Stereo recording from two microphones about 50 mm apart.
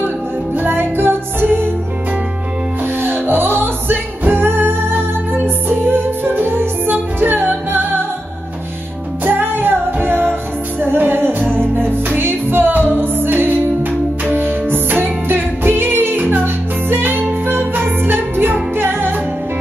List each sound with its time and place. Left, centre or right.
0.6 s music: right
3.0 s music: right
9.2 s music: right